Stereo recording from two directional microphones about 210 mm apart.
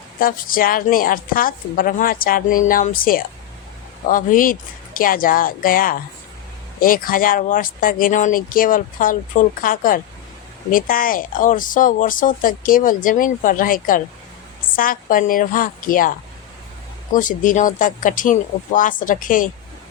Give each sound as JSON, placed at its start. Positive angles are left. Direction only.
{"t": 0.2, "sound": "a woman's voice", "side_deg": 40}